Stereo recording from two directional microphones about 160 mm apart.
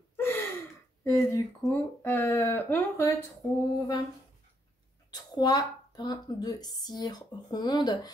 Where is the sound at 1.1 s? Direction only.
15° left (ahead or behind).